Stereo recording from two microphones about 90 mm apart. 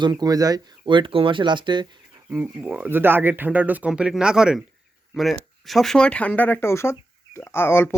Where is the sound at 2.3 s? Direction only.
20° right (ahead or behind).